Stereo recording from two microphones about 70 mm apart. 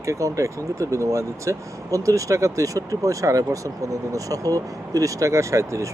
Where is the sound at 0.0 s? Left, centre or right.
Right.